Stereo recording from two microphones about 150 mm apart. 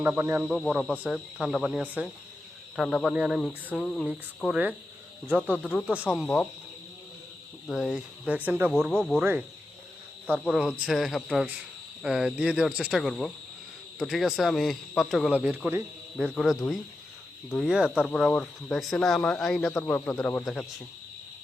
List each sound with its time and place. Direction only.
0.0 s speech: 10° right (ahead or behind)
0.4 s speech: centre (ahead or behind)
5.6 s speech: 10° left (ahead or behind)
7.7 s speech: centre (ahead or behind)
8.7 s speech: 5° left (ahead or behind)
10.2 s speech: 5° left (ahead or behind)
15.3 s speech: 10° right (ahead or behind)